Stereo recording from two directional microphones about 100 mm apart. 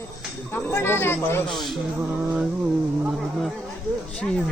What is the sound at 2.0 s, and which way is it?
Music, 15° right (ahead or behind).